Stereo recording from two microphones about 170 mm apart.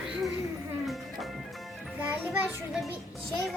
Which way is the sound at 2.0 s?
10° right (ahead or behind).